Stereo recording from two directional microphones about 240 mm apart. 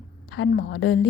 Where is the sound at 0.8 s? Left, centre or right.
Left.